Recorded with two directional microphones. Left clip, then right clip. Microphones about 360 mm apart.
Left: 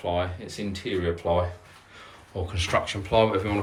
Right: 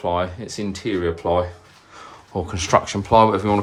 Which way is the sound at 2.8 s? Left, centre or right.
Centre.